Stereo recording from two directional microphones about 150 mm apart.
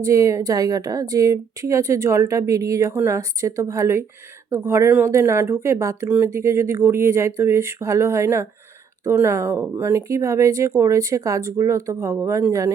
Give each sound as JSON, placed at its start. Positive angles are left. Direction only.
{"t": 0.0, "sound": "a woman's voice", "side_deg": -20}